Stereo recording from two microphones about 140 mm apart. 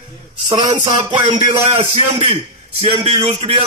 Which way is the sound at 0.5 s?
35° right (ahead or behind).